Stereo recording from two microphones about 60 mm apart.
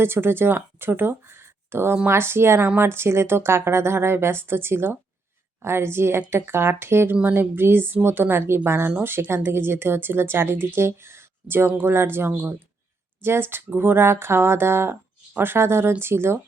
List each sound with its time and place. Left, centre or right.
0.0 s speech: right
7.2 s speech: right
13.5 s speech: right